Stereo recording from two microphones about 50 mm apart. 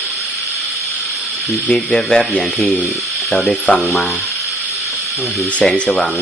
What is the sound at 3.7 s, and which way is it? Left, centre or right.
Speech, left.